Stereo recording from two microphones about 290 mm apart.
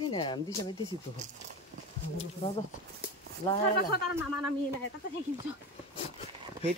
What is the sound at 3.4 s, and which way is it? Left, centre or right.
Speech, centre.